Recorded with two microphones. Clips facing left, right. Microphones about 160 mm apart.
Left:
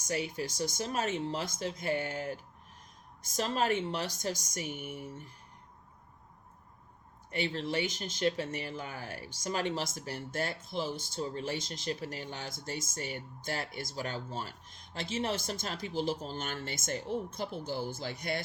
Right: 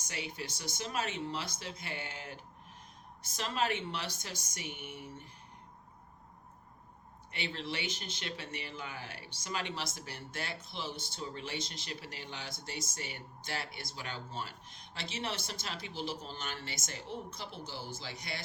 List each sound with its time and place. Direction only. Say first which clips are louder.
0.1 s speech: left 8 dB; 40° left (ahead or behind)
7.3 s speech: left 6 dB; 40° left (ahead or behind)